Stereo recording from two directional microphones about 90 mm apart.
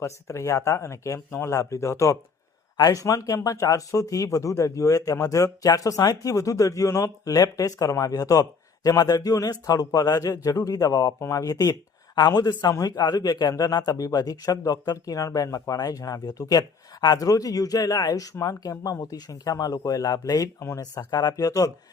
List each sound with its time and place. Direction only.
0.0 s speech: 35° left (ahead or behind)
2.7 s a man's voice: 50° left (ahead or behind)
3.0 s a man's voice: 35° left (ahead or behind)
20.6 s speech: 30° left (ahead or behind)
20.9 s a man's voice: 50° left (ahead or behind)